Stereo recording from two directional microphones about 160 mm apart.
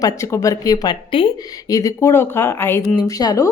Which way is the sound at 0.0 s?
20° left (ahead or behind).